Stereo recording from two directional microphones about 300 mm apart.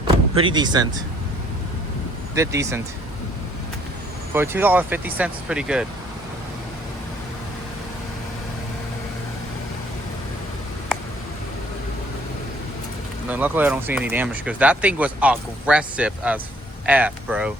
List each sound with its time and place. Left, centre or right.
0.3 s speech: centre
2.3 s speech: centre
4.4 s speech: centre
13.2 s speech: centre